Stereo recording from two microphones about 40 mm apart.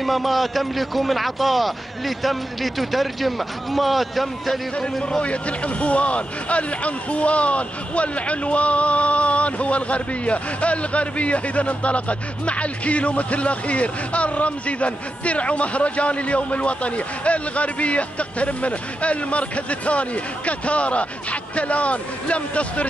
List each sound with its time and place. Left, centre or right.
0.0 s a man's voice: centre
5.2 s speech: left